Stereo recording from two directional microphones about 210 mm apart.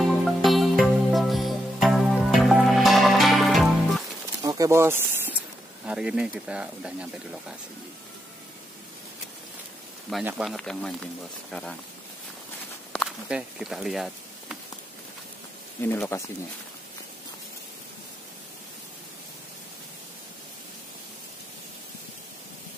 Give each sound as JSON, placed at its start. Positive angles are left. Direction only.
{"t": 0.2, "sound": "music", "side_deg": 0}
{"t": 4.4, "sound": "a sound", "side_deg": -15}
{"t": 5.9, "sound": "speech", "side_deg": -5}
{"t": 10.0, "sound": "speech", "side_deg": 0}
{"t": 12.9, "sound": "speech", "side_deg": 0}
{"t": 15.8, "sound": "speech", "side_deg": 10}